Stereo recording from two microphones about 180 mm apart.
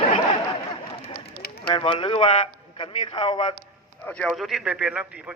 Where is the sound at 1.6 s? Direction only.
30° left (ahead or behind).